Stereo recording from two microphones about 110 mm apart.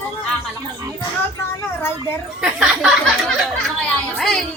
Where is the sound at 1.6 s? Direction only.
20° left (ahead or behind).